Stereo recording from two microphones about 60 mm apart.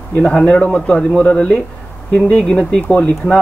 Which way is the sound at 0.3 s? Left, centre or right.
Centre.